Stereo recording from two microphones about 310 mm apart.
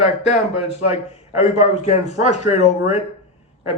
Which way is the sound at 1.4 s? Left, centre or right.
Left.